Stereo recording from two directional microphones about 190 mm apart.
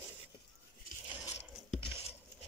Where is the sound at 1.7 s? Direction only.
30° left (ahead or behind).